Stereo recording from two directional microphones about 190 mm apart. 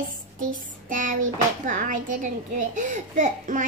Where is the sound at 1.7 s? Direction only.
45° right (ahead or behind).